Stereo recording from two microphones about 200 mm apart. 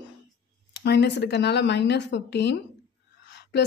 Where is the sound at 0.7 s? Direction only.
55° left (ahead or behind).